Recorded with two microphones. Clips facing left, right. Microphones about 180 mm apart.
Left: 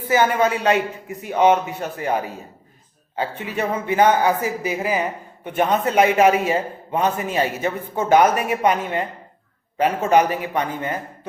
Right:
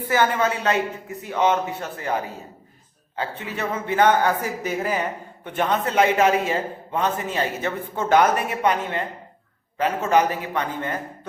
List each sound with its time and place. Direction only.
0.1 s a man's voice: 15° left (ahead or behind)